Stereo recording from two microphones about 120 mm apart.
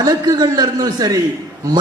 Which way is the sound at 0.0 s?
35° right (ahead or behind).